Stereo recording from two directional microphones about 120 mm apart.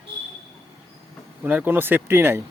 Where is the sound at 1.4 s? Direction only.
15° right (ahead or behind).